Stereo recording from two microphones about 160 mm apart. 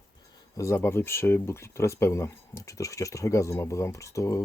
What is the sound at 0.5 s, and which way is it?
Speech, 20° left (ahead or behind).